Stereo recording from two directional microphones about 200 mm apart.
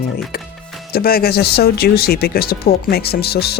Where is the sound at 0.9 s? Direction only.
50° left (ahead or behind).